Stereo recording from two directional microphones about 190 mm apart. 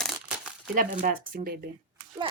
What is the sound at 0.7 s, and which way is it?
Speech, 45° right (ahead or behind).